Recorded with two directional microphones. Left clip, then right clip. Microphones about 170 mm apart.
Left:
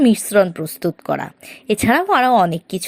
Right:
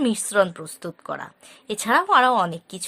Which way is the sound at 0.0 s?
15° left (ahead or behind).